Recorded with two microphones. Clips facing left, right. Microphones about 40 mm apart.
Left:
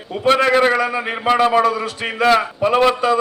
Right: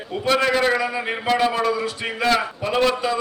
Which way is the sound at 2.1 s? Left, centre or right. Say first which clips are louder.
Left 6 dB; left.